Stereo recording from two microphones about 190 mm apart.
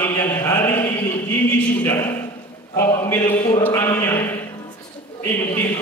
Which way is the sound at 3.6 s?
10° left (ahead or behind).